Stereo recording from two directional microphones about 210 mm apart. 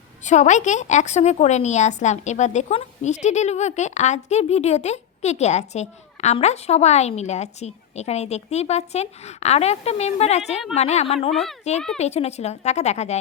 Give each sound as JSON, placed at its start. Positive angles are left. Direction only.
{"t": 0.3, "sound": "a woman's voice", "side_deg": 35}
{"t": 11.3, "sound": "speech", "side_deg": 0}
{"t": 11.9, "sound": "a woman's voice", "side_deg": 30}